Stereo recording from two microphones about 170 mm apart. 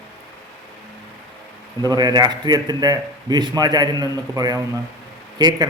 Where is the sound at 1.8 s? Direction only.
25° right (ahead or behind).